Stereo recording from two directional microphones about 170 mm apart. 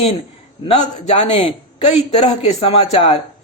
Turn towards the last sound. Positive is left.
turn(degrees=35)  # may be behind; listen again after turning